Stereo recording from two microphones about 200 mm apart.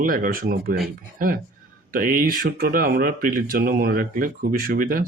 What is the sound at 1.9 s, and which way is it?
Speech, 45° right (ahead or behind).